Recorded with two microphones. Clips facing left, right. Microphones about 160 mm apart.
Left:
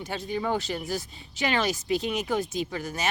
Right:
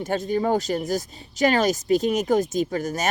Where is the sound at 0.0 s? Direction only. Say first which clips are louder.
Right 7 dB; 45° right (ahead or behind).